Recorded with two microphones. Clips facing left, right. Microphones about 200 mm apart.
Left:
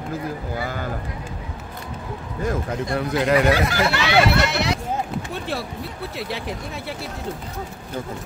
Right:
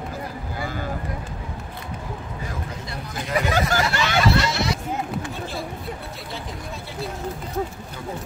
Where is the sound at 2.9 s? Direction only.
80° left.